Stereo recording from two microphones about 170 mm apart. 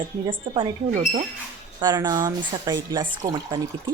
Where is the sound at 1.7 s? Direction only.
25° right (ahead or behind).